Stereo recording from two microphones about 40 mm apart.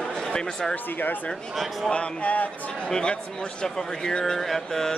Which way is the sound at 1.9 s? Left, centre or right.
Left.